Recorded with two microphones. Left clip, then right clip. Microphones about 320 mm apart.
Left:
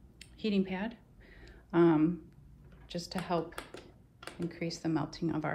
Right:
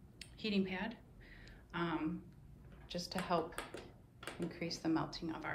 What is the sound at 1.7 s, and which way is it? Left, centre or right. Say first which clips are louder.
Speech: left 13 dB; centre.